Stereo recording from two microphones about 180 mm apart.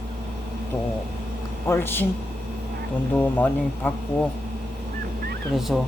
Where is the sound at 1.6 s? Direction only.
10° left (ahead or behind).